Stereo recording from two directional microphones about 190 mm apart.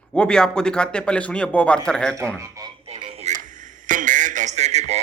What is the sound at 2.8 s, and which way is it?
Radio, 30° right (ahead or behind).